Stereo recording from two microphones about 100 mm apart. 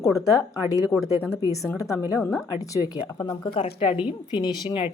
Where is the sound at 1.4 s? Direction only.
35° left (ahead or behind).